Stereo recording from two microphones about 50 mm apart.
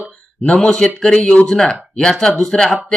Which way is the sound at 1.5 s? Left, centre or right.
Centre.